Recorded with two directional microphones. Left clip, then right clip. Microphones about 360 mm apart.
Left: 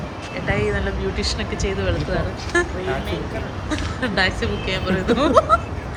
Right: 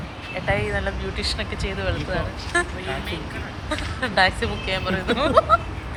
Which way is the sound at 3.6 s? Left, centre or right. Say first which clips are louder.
Left 1 dB; centre.